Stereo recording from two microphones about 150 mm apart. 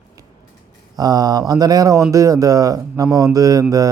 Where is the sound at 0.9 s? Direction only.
25° right (ahead or behind).